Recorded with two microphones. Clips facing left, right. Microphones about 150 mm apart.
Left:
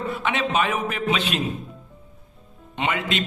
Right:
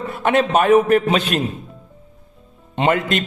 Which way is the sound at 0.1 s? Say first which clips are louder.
Right 10 dB; 45° right (ahead or behind).